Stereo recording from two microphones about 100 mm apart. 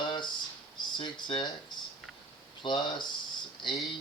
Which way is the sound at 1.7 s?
50° left (ahead or behind).